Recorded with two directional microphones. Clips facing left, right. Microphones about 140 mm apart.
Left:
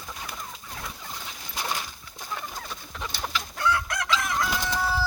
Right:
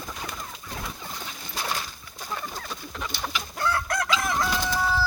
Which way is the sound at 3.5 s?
35° right (ahead or behind).